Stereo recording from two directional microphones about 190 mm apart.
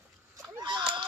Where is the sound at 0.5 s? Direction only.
25° right (ahead or behind).